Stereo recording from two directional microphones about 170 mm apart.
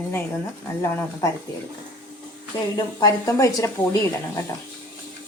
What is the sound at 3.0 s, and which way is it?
Speech, 20° left (ahead or behind).